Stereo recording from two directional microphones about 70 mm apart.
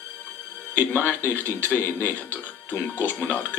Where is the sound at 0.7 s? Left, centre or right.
Left.